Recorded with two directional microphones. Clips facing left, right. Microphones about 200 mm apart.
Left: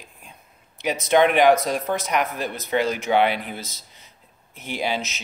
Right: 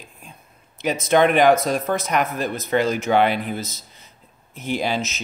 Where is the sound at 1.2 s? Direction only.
45° right (ahead or behind).